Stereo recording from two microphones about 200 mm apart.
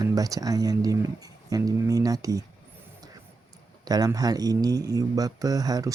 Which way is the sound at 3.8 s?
20° right (ahead or behind).